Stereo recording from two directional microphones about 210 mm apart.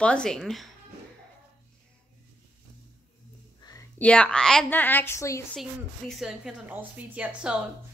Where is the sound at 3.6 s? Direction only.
15° left (ahead or behind).